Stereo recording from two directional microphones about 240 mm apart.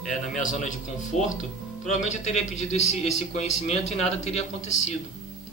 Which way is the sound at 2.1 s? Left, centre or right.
Left.